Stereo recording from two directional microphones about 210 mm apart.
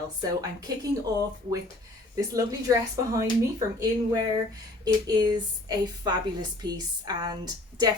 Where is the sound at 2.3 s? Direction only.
15° right (ahead or behind).